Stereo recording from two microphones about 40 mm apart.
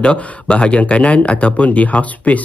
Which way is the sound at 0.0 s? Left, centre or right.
Left.